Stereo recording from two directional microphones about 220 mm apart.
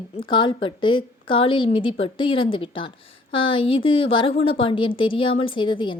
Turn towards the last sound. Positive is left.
turn(degrees=20)  # may be behind; listen again after turning